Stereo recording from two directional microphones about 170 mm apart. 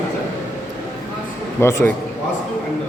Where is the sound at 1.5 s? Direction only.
15° left (ahead or behind).